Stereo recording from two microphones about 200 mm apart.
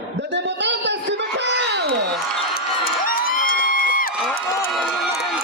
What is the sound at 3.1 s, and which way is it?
Crowd, 45° left (ahead or behind).